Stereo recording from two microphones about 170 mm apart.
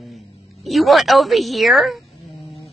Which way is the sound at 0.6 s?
Centre (ahead or behind).